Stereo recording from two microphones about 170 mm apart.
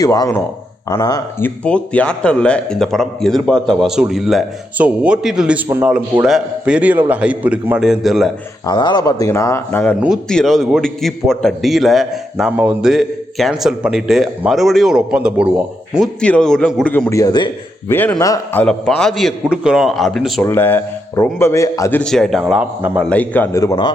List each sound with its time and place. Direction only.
0.0 s speech: 20° left (ahead or behind)
1.5 s a man's voice: 5° left (ahead or behind)
8.6 s a man's voice: 25° left (ahead or behind); by 16.0 s 5° right (ahead or behind)
16.2 s a man's voice: 5° left (ahead or behind)
17.1 s speech: 20° left (ahead or behind)
17.8 s a man's voice: 10° left (ahead or behind)
20.4 s speech: 10° left (ahead or behind)
22.0 s a man's voice: 5° left (ahead or behind)
23.0 s speech: 10° left (ahead or behind)